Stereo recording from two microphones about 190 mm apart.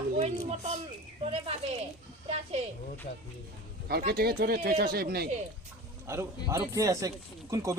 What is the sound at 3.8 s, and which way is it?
Speech, 55° right (ahead or behind).